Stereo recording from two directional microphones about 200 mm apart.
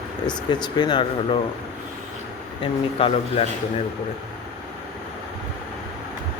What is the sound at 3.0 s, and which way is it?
Speech, 30° left (ahead or behind).